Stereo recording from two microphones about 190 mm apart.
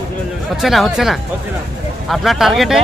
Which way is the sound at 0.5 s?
Centre (ahead or behind).